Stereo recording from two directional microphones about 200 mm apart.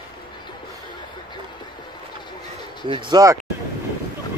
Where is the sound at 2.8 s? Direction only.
25° right (ahead or behind).